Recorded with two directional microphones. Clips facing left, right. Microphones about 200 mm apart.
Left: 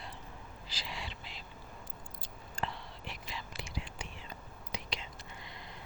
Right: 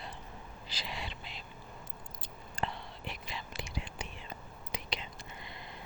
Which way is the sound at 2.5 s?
20° right (ahead or behind).